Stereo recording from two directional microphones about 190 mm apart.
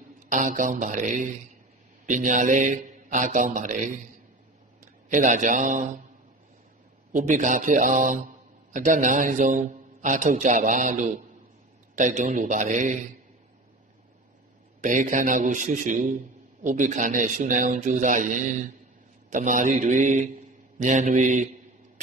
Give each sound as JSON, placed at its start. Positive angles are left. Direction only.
{"t": 0.3, "sound": "speech", "side_deg": -40}
{"t": 5.1, "sound": "speech", "side_deg": -40}
{"t": 7.1, "sound": "speech", "side_deg": -40}
{"t": 14.8, "sound": "speech", "side_deg": -40}